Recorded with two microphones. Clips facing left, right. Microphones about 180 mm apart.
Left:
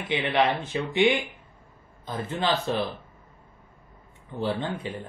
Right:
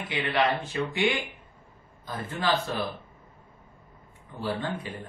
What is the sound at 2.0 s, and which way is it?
Speech, 25° left (ahead or behind).